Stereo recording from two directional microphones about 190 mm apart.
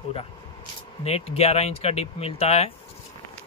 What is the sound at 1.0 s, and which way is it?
Speech, 35° left (ahead or behind).